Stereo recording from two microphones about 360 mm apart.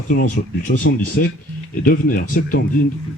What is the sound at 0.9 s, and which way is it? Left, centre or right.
Speech, left.